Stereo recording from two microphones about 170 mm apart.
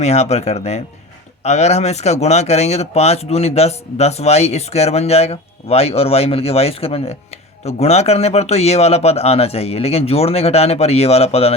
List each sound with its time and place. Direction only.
0.0 s speech: 40° left (ahead or behind)